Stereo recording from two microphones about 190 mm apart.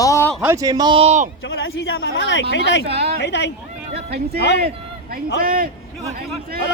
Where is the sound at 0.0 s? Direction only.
15° left (ahead or behind).